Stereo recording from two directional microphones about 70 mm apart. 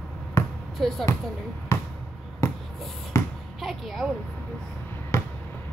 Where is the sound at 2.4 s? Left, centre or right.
Left.